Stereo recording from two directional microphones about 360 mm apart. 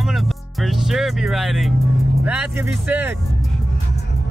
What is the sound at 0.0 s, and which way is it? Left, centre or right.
Music, centre.